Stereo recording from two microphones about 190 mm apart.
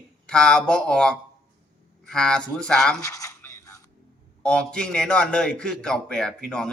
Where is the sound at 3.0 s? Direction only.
15° left (ahead or behind).